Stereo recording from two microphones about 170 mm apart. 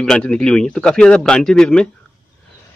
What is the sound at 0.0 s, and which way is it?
A man's voice, 5° left (ahead or behind).